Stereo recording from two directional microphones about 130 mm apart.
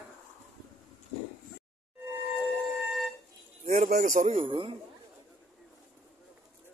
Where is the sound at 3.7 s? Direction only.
85° right.